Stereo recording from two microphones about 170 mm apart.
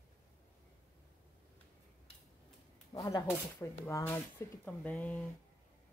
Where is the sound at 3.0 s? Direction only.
20° left (ahead or behind).